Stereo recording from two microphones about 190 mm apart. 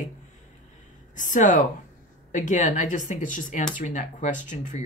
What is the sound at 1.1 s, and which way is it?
Speech, 40° left (ahead or behind).